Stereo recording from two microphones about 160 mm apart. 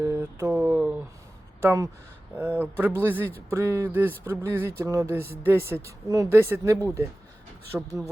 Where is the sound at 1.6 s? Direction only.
20° right (ahead or behind).